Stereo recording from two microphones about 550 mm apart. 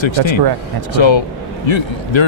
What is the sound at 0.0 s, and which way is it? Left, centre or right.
Speech, left.